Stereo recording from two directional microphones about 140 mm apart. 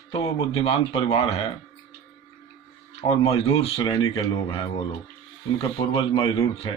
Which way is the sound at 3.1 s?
45° left (ahead or behind).